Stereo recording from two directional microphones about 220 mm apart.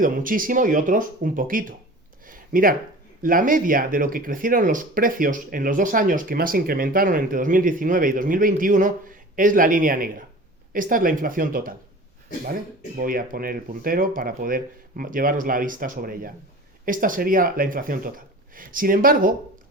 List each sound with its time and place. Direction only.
0.0 s speech: 40° right (ahead or behind)
2.2 s a sound: 40° right (ahead or behind)
3.2 s speech: 40° right (ahead or behind)
13.0 s speech: 40° right (ahead or behind)